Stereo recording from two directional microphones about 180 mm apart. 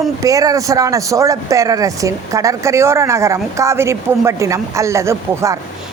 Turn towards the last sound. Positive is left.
turn(degrees=-15)  # may be behind; listen again after turning